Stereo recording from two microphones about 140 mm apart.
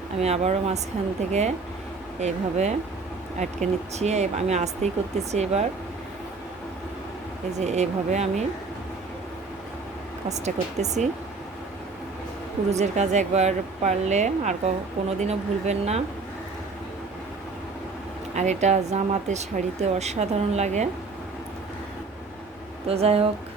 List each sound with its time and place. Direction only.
0.2 s a woman's voice: 50° right (ahead or behind)
7.6 s a woman's voice: 55° right (ahead or behind)
10.2 s speech: 55° right (ahead or behind)
12.7 s a woman's voice: 55° right (ahead or behind)
18.3 s a woman's voice: 55° right (ahead or behind)
22.9 s a woman's voice: 45° right (ahead or behind)